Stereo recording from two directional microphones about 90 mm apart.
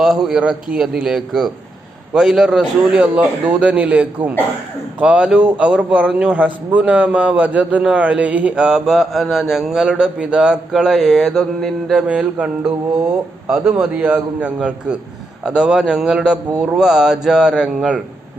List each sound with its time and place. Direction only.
0.0 s a man's voice: 5° right (ahead or behind)
12.0 s a man's voice: 15° right (ahead or behind)